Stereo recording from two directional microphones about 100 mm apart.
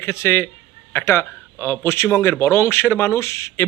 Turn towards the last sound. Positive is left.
turn(degrees=30)  # may be behind; listen again after turning